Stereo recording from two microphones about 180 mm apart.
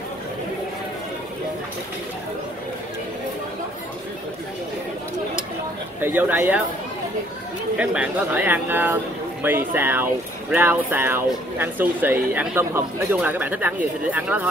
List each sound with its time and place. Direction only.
5.9 s speech: 10° right (ahead or behind)
7.7 s speech: 5° right (ahead or behind)